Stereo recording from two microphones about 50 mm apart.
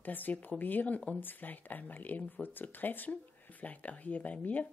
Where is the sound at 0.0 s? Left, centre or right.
Left.